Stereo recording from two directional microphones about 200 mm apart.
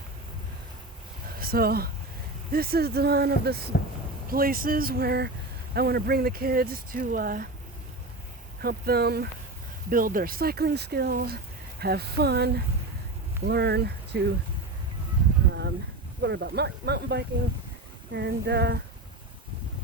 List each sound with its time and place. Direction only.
1.4 s speech: 50° right (ahead or behind)
8.6 s speech: 50° right (ahead or behind)
16.2 s speech: 60° right (ahead or behind)